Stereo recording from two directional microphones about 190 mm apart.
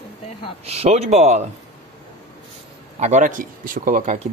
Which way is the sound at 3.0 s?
40° right (ahead or behind).